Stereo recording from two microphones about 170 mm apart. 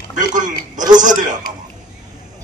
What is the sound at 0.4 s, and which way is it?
Speech, 50° right (ahead or behind).